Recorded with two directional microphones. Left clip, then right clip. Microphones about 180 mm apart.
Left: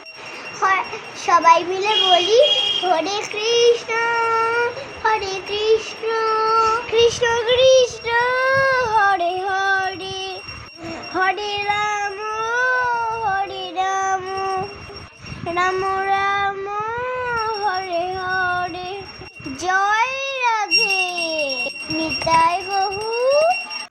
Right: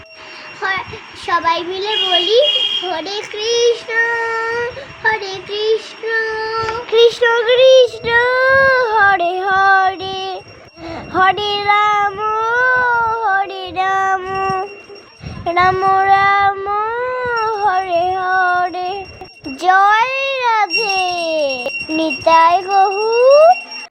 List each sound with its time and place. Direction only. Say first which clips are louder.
1.5 s a child's voice: left 3 dB; 20° left (ahead or behind)
1.9 s a child's voice: right 1 dB; 5° right (ahead or behind)
3.4 s child singing: right 1 dB; 10° right (ahead or behind)
6.9 s child singing: right 9 dB; 30° right (ahead or behind)
15.4 s a sound: right 7 dB; 35° right (ahead or behind)